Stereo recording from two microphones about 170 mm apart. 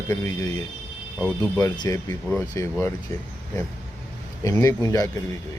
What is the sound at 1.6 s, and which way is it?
Speech, 20° left (ahead or behind).